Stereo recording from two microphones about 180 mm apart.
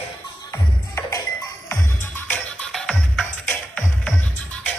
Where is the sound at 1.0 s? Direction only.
20° left (ahead or behind).